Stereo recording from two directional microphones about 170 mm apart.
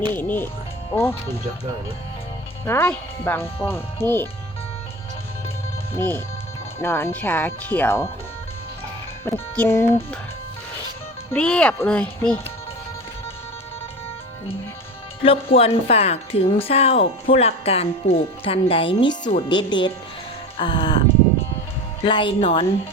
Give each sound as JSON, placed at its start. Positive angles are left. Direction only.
{"t": 0.0, "sound": "speech", "side_deg": 10}
{"t": 2.6, "sound": "speech", "side_deg": 15}
{"t": 5.9, "sound": "speech", "side_deg": 15}
{"t": 9.2, "sound": "speech", "side_deg": 15}
{"t": 11.3, "sound": "speech", "side_deg": 5}
{"t": 15.2, "sound": "a woman's voice", "side_deg": 35}
{"t": 22.0, "sound": "a woman's voice", "side_deg": 30}